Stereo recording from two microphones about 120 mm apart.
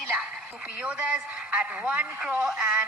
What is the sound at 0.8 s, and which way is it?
A man's voice, 10° right (ahead or behind).